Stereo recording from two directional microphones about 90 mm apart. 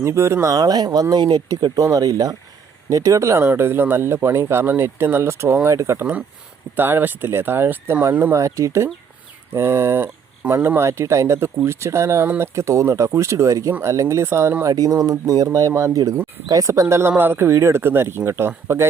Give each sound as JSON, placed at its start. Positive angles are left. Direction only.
{"t": 0.0, "sound": "speech", "side_deg": -30}
{"t": 6.7, "sound": "speech", "side_deg": -25}
{"t": 16.8, "sound": "speech", "side_deg": -30}